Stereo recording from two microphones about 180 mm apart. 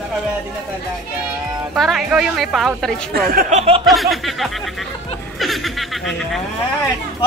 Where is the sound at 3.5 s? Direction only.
35° right (ahead or behind).